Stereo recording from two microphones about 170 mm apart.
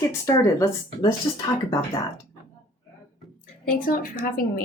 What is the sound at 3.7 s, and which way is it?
Speech, 55° left (ahead or behind).